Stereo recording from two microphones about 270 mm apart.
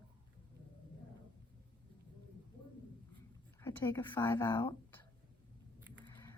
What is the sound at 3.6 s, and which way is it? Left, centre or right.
Speech, centre.